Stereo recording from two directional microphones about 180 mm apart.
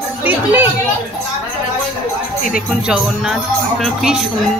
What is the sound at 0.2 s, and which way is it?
Speech, 10° right (ahead or behind).